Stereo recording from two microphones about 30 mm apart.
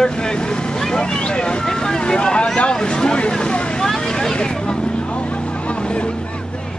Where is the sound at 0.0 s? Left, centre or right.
Left.